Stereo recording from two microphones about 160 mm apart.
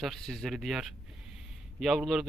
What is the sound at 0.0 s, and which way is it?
Speech, centre (ahead or behind).